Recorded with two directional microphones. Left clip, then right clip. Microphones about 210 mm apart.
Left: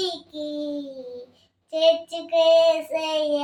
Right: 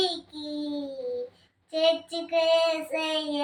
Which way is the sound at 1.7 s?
20° left (ahead or behind).